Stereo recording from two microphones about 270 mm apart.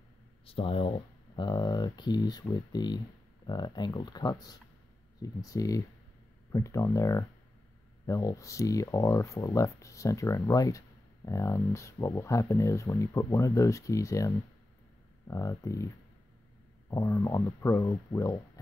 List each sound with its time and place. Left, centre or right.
0.5 s speech: left
16.9 s speech: centre